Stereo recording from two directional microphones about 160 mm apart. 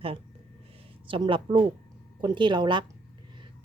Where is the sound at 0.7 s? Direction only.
30° right (ahead or behind).